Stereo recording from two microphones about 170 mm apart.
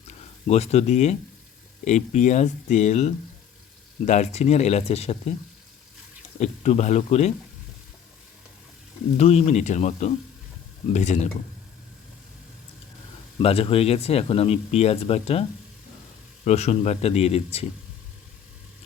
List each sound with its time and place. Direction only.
0.4 s speech: 40° left (ahead or behind)
6.4 s speech: 40° left (ahead or behind)
9.1 s speech: 40° left (ahead or behind)
13.4 s speech: 35° left (ahead or behind)